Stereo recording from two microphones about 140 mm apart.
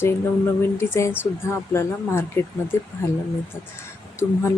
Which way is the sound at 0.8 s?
20° left (ahead or behind).